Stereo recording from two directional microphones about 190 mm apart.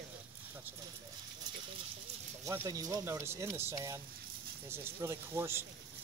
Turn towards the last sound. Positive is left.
turn(degrees=-15)  # may be behind; listen again after turning